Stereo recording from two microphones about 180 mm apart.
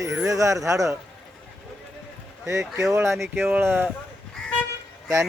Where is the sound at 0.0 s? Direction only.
15° right (ahead or behind).